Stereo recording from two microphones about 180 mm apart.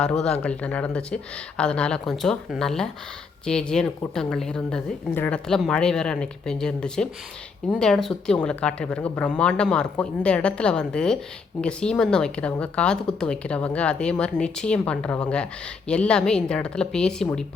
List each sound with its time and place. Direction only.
0.0 s a woman's voice: 5° left (ahead or behind)